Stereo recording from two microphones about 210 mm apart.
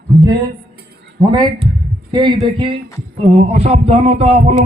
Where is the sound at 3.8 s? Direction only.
30° right (ahead or behind).